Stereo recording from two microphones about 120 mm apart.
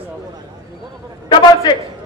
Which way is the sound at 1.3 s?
40° left (ahead or behind).